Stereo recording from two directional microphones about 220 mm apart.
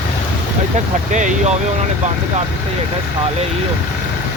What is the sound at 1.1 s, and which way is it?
Speech, 35° right (ahead or behind).